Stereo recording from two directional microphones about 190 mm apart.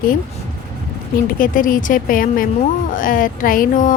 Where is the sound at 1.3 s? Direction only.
45° left (ahead or behind).